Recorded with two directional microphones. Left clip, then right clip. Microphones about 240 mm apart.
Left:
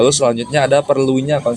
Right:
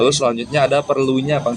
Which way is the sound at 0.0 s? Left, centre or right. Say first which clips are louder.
Left 3 dB; left.